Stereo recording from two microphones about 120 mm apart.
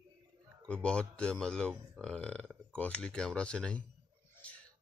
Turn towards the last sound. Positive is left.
turn(degrees=5)  # may be behind; listen again after turning